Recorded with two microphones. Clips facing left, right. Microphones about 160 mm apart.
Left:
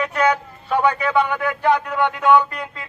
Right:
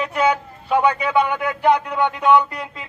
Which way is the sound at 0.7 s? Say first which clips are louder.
Right 1 dB; 15° right (ahead or behind).